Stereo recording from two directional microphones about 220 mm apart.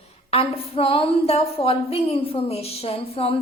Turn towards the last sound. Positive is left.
turn(degrees=25)  # may be behind; listen again after turning